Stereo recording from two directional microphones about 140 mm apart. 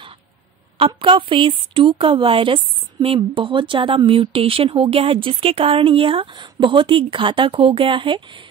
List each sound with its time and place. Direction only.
0.7 s speech: 40° right (ahead or behind)